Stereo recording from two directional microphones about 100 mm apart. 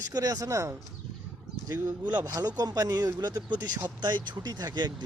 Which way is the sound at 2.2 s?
35° right (ahead or behind).